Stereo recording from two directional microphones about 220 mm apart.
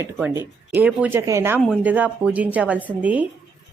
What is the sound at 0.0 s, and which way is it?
A woman's voice, 10° right (ahead or behind).